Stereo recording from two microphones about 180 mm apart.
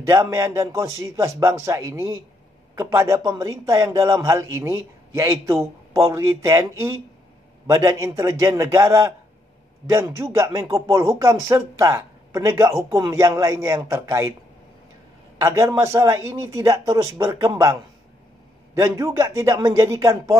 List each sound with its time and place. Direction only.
0.0 s a man's voice: 20° right (ahead or behind)
15.4 s a man's voice: 15° right (ahead or behind)
18.8 s a man's voice: 15° right (ahead or behind)